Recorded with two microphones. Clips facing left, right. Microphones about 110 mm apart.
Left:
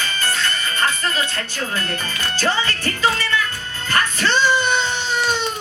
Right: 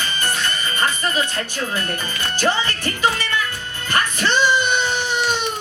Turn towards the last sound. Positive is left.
turn(degrees=-15)  # may be behind; listen again after turning